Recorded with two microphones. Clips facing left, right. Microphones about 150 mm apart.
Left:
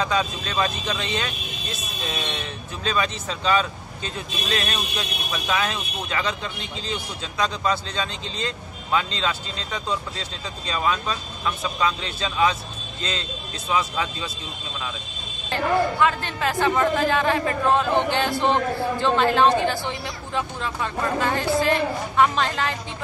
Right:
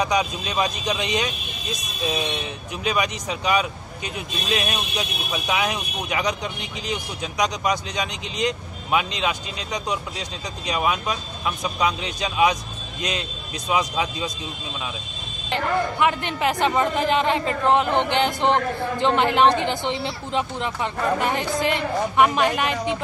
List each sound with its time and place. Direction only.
0.0 s speech: 15° right (ahead or behind)
15.5 s a man's voice: 20° right (ahead or behind)